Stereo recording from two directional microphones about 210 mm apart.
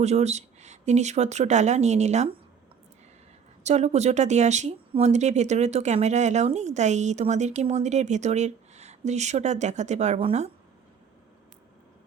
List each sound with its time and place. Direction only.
0.0 s speech: 30° right (ahead or behind)
3.6 s speech: 35° right (ahead or behind)